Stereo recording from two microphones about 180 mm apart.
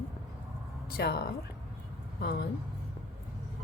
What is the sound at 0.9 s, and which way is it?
Speech, 60° left (ahead or behind).